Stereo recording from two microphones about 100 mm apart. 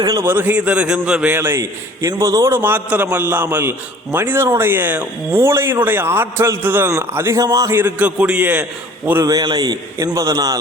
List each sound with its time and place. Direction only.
0.2 s speech: 20° right (ahead or behind)
1.4 s a man's voice: 25° right (ahead or behind)
7.8 s speech: 15° right (ahead or behind)
9.2 s a man's voice: 40° right (ahead or behind)